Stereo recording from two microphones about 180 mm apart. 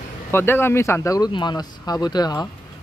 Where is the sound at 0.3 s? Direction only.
10° left (ahead or behind).